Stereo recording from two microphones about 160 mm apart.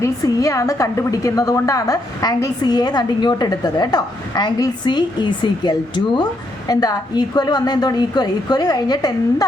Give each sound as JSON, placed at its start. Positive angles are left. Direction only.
{"t": 0.0, "sound": "a woman's voice", "side_deg": 20}